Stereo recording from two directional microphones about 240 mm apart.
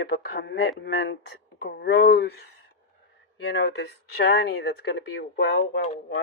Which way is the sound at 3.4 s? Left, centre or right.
Left.